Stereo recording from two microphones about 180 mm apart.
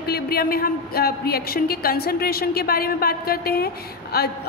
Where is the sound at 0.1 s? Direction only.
60° left (ahead or behind).